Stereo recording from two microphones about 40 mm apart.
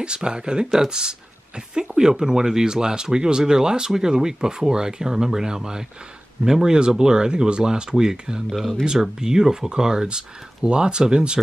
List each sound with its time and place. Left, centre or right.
0.0 s speech: right
8.5 s speech: centre
8.8 s speech: centre